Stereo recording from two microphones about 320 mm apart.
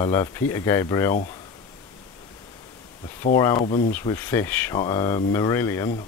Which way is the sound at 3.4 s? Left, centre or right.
Centre.